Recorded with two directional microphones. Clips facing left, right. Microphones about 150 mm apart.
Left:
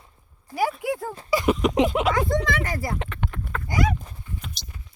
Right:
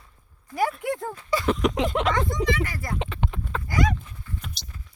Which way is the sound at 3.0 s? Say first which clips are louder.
Right 2 dB; 25° right (ahead or behind).